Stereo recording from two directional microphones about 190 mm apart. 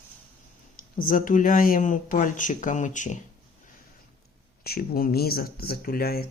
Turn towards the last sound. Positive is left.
turn(degrees=55)  # may be behind; listen again after turning